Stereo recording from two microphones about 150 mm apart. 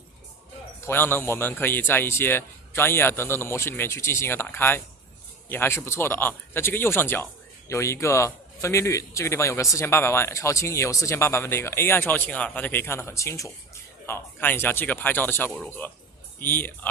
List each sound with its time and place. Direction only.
0.8 s a man's voice: 15° left (ahead or behind)